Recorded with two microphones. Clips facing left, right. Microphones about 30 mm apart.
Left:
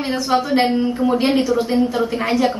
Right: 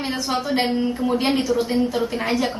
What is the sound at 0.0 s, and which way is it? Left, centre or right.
A woman's voice, centre.